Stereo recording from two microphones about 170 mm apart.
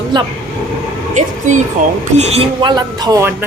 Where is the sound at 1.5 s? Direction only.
45° right (ahead or behind).